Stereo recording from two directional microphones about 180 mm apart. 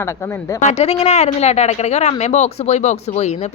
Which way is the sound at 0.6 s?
35° left (ahead or behind).